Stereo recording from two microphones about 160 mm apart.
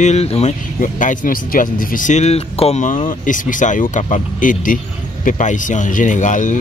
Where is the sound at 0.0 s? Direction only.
40° left (ahead or behind).